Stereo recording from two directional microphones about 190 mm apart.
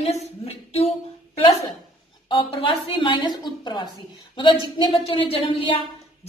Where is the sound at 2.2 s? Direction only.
25° left (ahead or behind).